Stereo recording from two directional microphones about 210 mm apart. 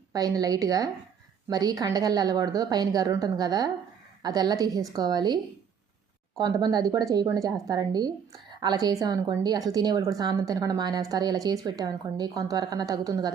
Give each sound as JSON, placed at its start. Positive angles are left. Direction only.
{"t": 0.1, "sound": "a woman's voice", "side_deg": -15}